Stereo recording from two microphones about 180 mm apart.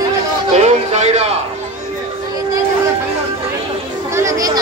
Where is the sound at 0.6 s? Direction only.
40° right (ahead or behind).